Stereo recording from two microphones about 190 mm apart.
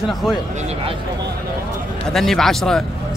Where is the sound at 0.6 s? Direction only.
35° right (ahead or behind).